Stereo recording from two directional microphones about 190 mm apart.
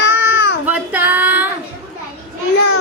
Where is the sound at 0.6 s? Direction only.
10° right (ahead or behind).